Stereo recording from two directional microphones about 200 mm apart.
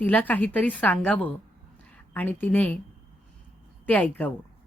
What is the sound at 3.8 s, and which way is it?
Speech, 10° left (ahead or behind).